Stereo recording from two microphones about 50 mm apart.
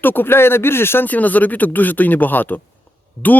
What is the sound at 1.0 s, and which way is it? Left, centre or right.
Speech, left.